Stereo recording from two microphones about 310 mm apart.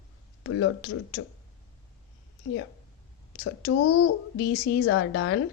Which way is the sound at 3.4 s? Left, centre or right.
Left.